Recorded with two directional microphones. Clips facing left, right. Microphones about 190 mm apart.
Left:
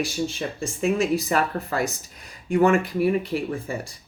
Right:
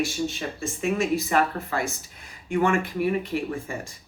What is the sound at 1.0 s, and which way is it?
Speech, 40° left (ahead or behind).